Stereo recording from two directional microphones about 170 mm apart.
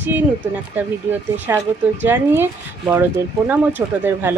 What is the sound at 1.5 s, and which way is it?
Speech, 15° right (ahead or behind).